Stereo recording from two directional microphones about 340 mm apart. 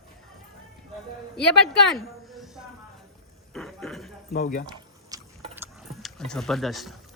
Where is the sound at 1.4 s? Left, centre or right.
Centre.